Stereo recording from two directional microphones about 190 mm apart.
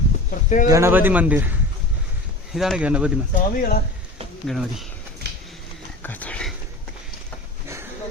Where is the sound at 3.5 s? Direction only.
50° left (ahead or behind).